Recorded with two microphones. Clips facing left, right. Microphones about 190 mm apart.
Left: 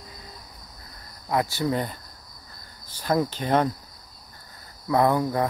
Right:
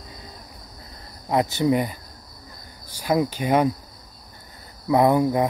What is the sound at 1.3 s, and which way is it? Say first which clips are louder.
Speech: right 4 dB; 20° right (ahead or behind).